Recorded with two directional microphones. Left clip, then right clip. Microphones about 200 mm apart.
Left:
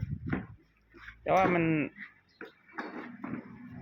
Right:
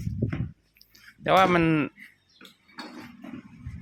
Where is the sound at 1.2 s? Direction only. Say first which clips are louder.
Right 6 dB; 45° right (ahead or behind).